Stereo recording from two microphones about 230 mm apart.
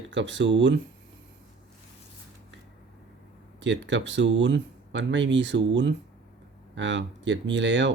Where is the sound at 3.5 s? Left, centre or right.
Right.